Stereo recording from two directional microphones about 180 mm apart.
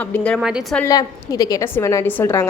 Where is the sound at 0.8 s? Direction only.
20° left (ahead or behind).